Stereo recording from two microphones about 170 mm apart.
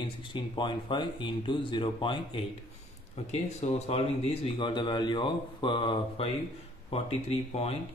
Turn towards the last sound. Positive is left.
turn(degrees=35)  # may be behind; listen again after turning